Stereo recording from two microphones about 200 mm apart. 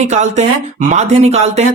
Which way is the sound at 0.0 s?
35° right (ahead or behind).